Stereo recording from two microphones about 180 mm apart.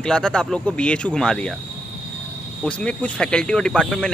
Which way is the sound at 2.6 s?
5° left (ahead or behind).